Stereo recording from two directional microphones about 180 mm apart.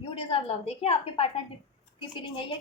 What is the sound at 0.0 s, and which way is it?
A woman's voice, 30° left (ahead or behind).